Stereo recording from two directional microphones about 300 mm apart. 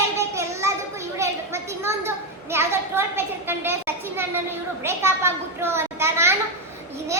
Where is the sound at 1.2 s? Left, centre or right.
Centre.